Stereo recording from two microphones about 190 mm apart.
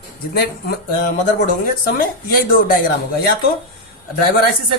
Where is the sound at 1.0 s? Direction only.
45° left (ahead or behind).